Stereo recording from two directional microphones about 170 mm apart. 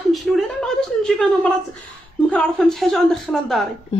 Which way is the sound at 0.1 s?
Centre (ahead or behind).